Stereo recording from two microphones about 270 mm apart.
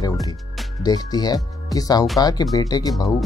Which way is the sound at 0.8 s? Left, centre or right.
Centre.